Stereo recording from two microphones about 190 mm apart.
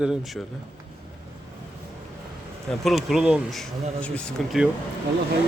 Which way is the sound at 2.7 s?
Centre (ahead or behind).